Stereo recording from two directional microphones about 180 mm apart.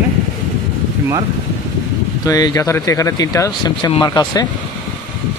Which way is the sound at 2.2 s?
20° left (ahead or behind).